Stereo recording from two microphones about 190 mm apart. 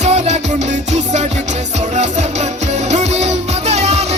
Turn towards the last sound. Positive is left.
turn(degrees=-35)  # may be behind; listen again after turning